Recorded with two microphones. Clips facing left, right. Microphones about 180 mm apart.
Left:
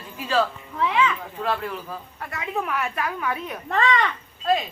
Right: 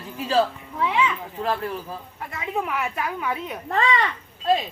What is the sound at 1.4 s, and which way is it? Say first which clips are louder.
Speech: right 1 dB; 35° right (ahead or behind).